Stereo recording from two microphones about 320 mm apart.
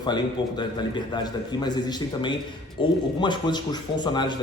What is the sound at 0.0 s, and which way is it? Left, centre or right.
Speech, centre.